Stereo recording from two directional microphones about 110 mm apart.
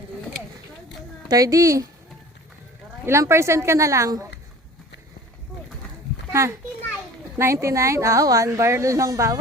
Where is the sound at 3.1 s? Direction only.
25° right (ahead or behind).